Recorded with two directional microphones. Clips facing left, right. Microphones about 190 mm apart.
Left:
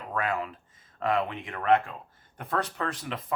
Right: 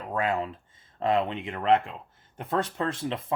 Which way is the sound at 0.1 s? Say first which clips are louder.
Right 3 dB; 25° right (ahead or behind).